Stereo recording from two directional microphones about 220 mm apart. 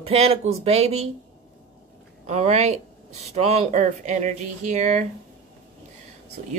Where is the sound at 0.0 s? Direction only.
30° right (ahead or behind).